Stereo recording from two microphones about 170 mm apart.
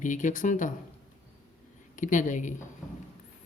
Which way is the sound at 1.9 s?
50° left (ahead or behind).